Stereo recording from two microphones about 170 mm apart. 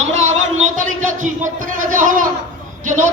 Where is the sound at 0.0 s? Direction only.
40° right (ahead or behind).